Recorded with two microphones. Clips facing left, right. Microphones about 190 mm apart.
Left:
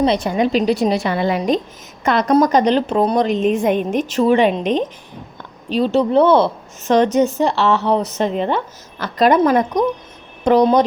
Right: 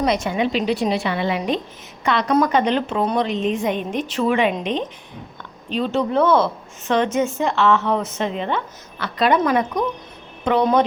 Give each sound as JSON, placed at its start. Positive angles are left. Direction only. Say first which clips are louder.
{"t": 0.0, "sound": "a woman's voice", "louder": "left 4 dB", "side_deg": 30}